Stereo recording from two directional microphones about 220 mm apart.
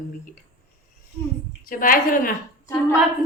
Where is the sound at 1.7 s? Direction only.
40° left (ahead or behind).